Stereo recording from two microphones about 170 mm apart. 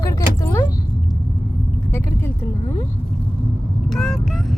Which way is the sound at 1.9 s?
15° left (ahead or behind).